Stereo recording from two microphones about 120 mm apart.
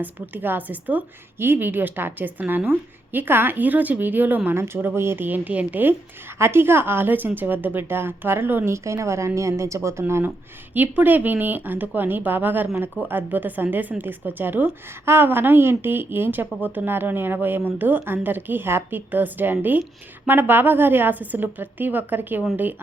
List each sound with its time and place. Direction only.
0.0 s a woman's voice: 15° right (ahead or behind)
16.5 s speech: 10° left (ahead or behind)
16.7 s a woman's voice: 15° right (ahead or behind)